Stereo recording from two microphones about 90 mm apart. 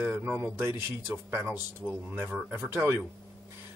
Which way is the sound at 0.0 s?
25° right (ahead or behind).